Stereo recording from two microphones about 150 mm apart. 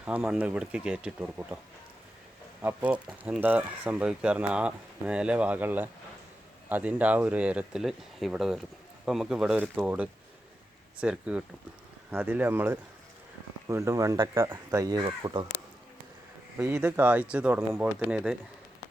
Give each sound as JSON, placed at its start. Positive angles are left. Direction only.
{"t": 0.0, "sound": "speech", "side_deg": -10}
{"t": 2.6, "sound": "speech", "side_deg": -10}
{"t": 16.6, "sound": "speech", "side_deg": -15}